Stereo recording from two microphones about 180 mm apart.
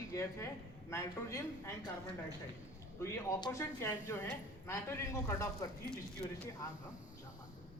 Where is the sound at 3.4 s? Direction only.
15° left (ahead or behind).